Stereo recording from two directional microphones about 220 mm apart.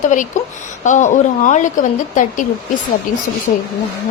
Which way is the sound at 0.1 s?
35° left (ahead or behind).